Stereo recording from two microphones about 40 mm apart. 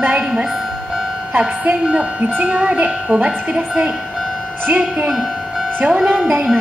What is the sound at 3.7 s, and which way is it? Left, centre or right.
Speech, centre.